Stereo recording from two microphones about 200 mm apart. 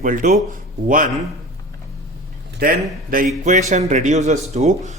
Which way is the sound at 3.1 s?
40° right (ahead or behind).